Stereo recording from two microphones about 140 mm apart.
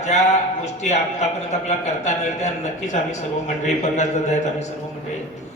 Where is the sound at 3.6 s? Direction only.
55° left (ahead or behind).